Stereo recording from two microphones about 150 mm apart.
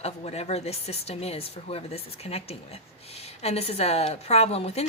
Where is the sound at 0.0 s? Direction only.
45° left (ahead or behind).